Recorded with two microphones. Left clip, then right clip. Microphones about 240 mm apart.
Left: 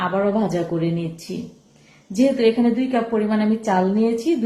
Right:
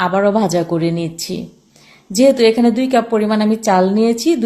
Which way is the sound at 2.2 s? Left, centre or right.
Right.